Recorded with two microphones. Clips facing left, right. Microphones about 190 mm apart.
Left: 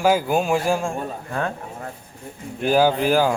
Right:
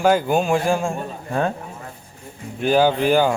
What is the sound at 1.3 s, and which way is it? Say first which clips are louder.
Speech: right 5 dB; 25° right (ahead or behind).